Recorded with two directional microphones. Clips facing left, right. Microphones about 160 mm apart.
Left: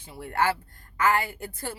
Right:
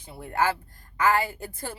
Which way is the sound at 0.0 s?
20° right (ahead or behind).